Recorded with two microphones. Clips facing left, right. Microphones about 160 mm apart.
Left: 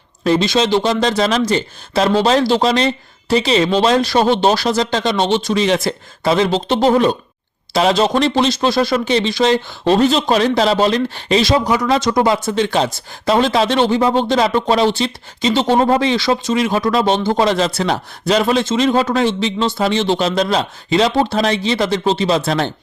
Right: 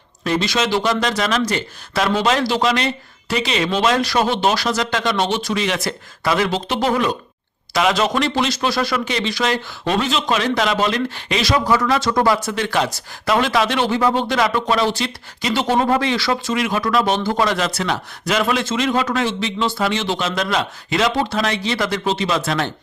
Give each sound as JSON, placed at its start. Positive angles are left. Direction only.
{"t": 0.3, "sound": "speech", "side_deg": 25}
{"t": 11.6, "sound": "speech", "side_deg": 15}